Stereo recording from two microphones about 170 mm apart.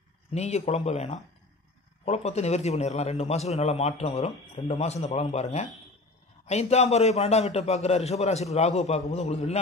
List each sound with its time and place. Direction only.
0.3 s a man's voice: 40° left (ahead or behind)